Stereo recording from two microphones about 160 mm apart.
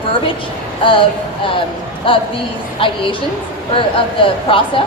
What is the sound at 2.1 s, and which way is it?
A woman's voice, 30° left (ahead or behind).